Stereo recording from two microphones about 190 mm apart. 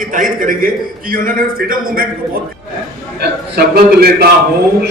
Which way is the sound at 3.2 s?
60° right (ahead or behind).